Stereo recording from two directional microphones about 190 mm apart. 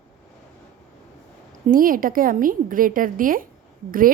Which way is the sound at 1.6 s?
45° right (ahead or behind).